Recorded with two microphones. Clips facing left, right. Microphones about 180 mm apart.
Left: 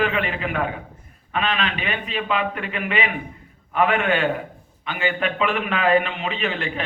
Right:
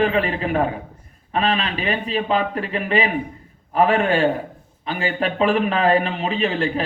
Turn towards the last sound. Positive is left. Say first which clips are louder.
# right 5 dB
turn(degrees=-35)  # may be behind; listen again after turning